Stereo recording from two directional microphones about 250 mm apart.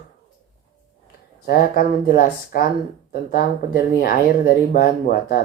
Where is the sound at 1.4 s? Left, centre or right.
Left.